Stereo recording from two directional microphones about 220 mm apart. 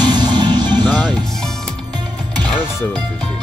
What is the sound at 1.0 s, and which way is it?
Music, centre (ahead or behind).